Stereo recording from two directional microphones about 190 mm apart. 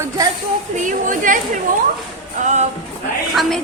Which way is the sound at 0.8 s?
45° right (ahead or behind).